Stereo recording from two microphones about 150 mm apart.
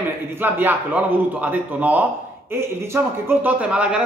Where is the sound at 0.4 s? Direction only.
10° right (ahead or behind).